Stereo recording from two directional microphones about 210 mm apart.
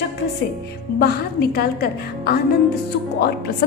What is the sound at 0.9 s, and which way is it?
A woman's voice, 45° left (ahead or behind).